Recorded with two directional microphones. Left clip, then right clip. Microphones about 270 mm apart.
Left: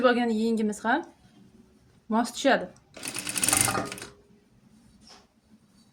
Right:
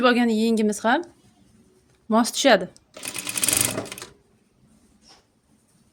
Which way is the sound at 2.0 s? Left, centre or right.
Right.